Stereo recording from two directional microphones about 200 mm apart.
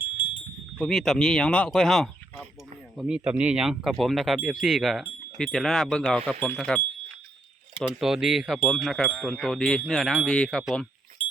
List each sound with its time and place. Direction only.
0.8 s speech: centre (ahead or behind)